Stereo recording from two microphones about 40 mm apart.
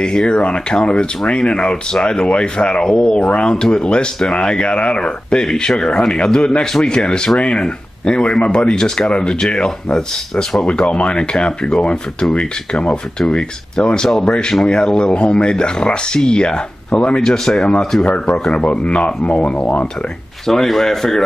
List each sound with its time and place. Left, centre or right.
0.0 s speech: left
8.7 s speech: centre
10.6 s speech: left
17.2 s speech: centre
18.5 s speech: left
20.4 s speech: centre